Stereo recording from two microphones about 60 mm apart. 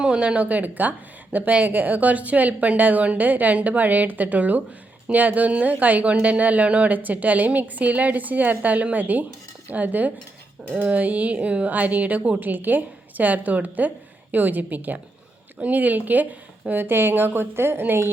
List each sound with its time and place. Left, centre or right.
0.0 s speech: centre
16.8 s a woman's voice: right